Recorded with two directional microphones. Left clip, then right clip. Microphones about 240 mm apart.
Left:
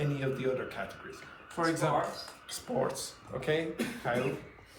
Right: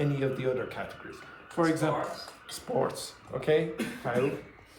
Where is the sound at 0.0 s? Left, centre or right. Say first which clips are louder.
Right 3 dB; right.